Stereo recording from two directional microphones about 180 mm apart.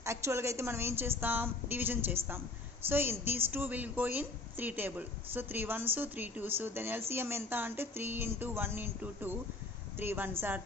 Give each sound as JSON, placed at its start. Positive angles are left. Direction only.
{"t": 0.0, "sound": "a woman's voice", "side_deg": -15}